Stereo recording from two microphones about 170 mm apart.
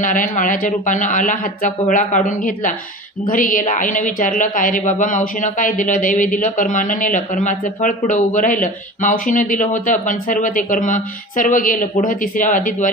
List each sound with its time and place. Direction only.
0.0 s speech: 50° left (ahead or behind)